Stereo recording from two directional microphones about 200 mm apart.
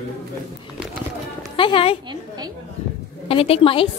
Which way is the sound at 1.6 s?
25° left (ahead or behind).